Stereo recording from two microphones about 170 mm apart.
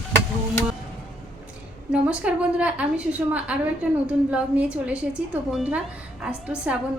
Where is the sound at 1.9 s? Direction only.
5° right (ahead or behind).